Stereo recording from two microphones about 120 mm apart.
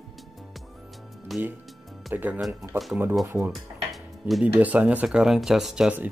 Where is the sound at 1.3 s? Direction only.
Centre (ahead or behind).